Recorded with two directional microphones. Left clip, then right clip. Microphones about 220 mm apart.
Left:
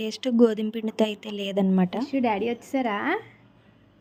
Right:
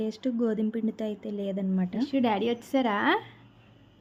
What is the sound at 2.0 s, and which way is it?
A woman's voice, 5° left (ahead or behind).